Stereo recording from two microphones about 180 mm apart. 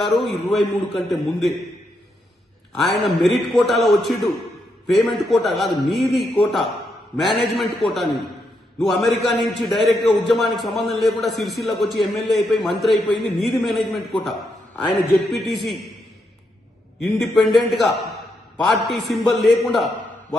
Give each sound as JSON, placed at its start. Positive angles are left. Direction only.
{"t": 0.0, "sound": "a man's voice", "side_deg": 0}
{"t": 2.7, "sound": "a man's voice", "side_deg": 0}
{"t": 17.0, "sound": "a man's voice", "side_deg": 0}